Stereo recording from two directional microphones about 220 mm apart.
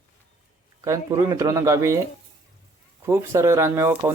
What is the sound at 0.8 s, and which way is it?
Speech, 15° right (ahead or behind).